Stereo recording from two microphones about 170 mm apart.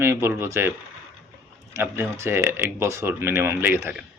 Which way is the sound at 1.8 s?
15° right (ahead or behind).